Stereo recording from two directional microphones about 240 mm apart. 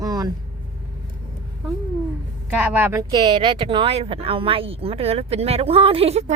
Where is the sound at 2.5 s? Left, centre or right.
Centre.